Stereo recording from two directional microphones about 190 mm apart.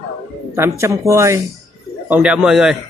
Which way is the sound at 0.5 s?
15° right (ahead or behind).